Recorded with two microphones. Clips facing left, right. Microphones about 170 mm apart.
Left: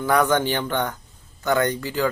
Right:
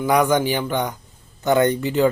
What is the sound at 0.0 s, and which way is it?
Speech, 15° right (ahead or behind).